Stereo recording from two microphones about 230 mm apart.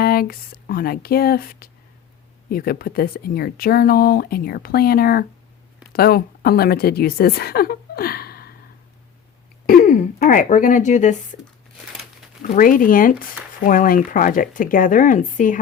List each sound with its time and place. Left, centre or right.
0.0 s a woman's voice: left
9.6 s speech: left
12.4 s speech: left